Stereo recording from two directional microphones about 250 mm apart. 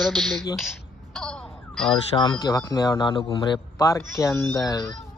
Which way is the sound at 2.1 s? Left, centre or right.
Centre.